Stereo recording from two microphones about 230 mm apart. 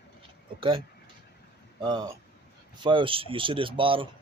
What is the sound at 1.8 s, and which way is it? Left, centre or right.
Speech, centre.